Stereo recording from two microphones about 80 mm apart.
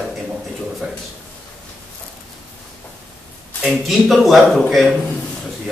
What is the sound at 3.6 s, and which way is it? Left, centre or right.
A man's voice, centre.